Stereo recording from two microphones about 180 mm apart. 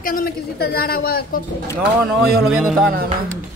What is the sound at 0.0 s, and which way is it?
A woman's voice, 55° left (ahead or behind).